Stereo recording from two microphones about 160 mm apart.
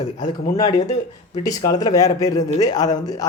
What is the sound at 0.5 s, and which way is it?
Speech, 25° left (ahead or behind).